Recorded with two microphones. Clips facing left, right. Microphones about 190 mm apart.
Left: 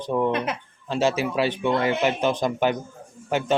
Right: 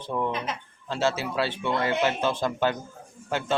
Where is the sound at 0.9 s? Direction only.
15° left (ahead or behind).